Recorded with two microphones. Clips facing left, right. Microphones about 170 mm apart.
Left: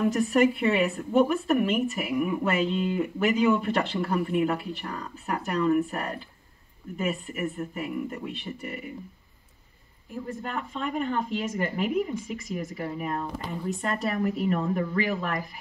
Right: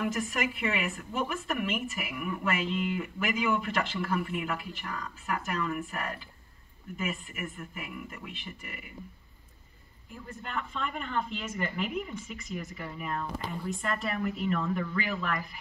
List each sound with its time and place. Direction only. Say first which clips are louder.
0.0 s speech: left 9 dB; 35° left (ahead or behind)
10.4 s speech: left 1 dB; 40° left (ahead or behind)